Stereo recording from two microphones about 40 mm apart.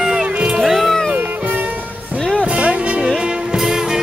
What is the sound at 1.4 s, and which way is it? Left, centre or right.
Music, right.